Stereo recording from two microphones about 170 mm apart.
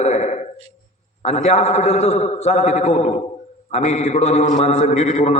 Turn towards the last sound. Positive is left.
turn(degrees=40)  # may be behind; listen again after turning